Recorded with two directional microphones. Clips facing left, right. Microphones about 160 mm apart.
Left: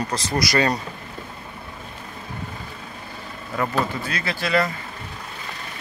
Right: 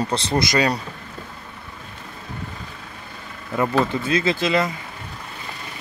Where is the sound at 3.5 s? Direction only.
20° right (ahead or behind).